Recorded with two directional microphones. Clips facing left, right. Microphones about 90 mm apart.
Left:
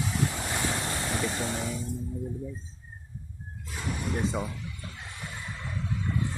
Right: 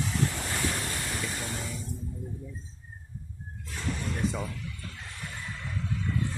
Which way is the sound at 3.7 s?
10° left (ahead or behind).